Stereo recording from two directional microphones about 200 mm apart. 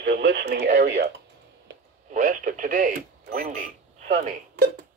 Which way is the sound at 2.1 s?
40° right (ahead or behind).